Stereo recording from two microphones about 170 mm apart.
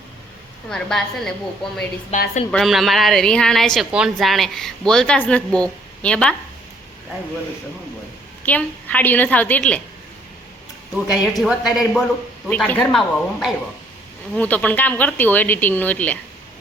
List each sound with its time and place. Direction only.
0.7 s a woman's voice: 5° left (ahead or behind)
2.1 s a woman's voice: 40° left (ahead or behind)
2.5 s a woman's voice: centre (ahead or behind)
8.4 s speech: 10° left (ahead or behind)
10.9 s a woman's voice: centre (ahead or behind)